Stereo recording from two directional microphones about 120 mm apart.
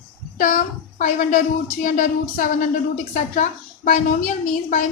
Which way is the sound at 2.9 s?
90° left.